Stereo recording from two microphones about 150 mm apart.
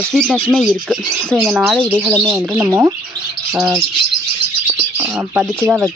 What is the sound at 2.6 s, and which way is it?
Speech, 15° right (ahead or behind).